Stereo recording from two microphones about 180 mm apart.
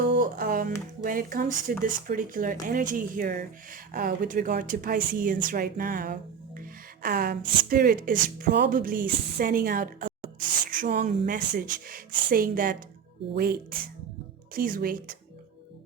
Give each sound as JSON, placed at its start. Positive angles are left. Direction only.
{"t": 0.1, "sound": "music", "side_deg": -55}
{"t": 1.0, "sound": "speech", "side_deg": -50}
{"t": 6.6, "sound": "music", "side_deg": -55}
{"t": 7.7, "sound": "speech", "side_deg": -55}